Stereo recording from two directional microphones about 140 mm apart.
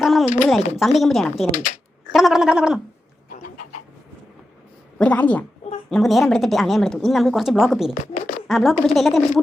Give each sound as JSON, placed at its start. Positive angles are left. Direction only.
{"t": 0.0, "sound": "speech", "side_deg": 0}
{"t": 4.9, "sound": "a woman's voice", "side_deg": 10}
{"t": 7.9, "sound": "speech", "side_deg": 85}
{"t": 8.4, "sound": "speech", "side_deg": 0}